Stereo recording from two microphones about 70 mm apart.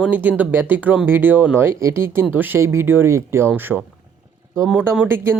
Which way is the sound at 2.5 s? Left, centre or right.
Right.